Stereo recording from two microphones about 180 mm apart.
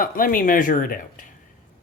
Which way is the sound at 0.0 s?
50° left (ahead or behind).